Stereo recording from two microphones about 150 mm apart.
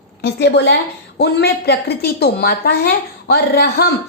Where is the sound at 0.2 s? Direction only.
90° left.